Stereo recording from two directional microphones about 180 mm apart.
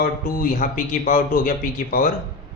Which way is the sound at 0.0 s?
50° left (ahead or behind).